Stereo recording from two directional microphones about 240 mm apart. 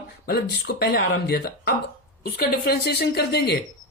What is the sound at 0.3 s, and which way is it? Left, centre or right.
A woman's voice, left.